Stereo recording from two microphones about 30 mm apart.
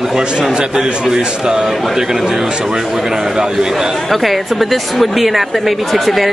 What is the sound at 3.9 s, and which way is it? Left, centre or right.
A woman's voice, centre.